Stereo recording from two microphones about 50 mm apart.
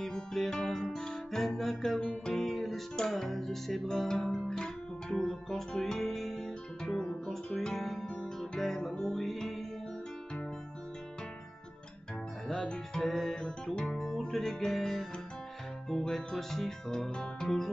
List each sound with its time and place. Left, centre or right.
0.0 s music: centre
2.0 s music: centre
4.5 s guitar: centre
5.7 s music: centre
12.4 s music: centre
14.2 s speech: centre